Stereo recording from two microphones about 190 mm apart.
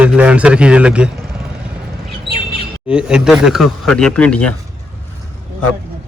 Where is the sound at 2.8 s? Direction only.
5° right (ahead or behind).